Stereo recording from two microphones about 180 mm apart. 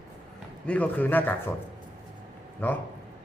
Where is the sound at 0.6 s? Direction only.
5° left (ahead or behind).